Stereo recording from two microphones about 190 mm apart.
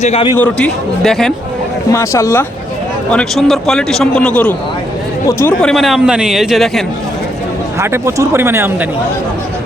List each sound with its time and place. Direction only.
0.0 s a man's voice: 35° left (ahead or behind)
0.3 s a man's voice: 10° left (ahead or behind)
1.9 s speech: 15° left (ahead or behind)
3.1 s a man's voice: 5° left (ahead or behind)
7.8 s speech: 15° right (ahead or behind)